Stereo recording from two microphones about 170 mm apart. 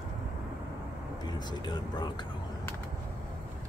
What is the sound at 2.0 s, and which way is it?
Speech, 25° left (ahead or behind).